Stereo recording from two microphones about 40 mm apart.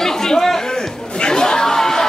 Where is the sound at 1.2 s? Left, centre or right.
Centre.